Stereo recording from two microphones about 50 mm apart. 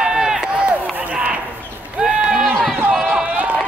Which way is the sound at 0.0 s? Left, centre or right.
Centre.